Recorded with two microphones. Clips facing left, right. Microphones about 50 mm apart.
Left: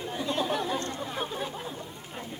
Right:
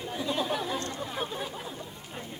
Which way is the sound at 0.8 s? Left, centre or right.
Left.